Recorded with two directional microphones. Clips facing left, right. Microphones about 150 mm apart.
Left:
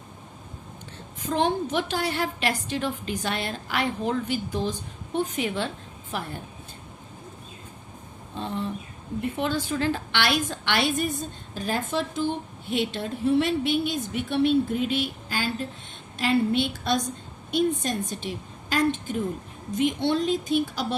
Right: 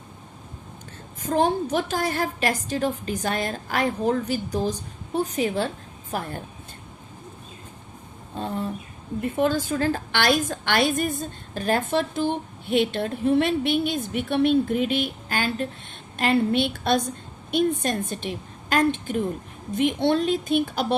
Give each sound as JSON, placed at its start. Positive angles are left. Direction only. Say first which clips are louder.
{"t": 1.2, "sound": "a woman's voice", "louder": "right 3 dB", "side_deg": -45}
{"t": 8.4, "sound": "a woman's voice", "louder": "right 2 dB", "side_deg": -45}